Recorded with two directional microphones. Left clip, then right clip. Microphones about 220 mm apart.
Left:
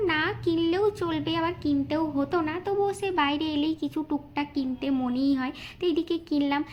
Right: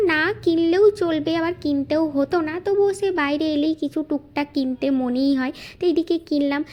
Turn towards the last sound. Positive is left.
turn(degrees=-25)  # may be behind; listen again after turning